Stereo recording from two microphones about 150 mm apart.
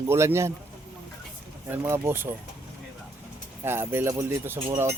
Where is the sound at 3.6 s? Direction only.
15° right (ahead or behind).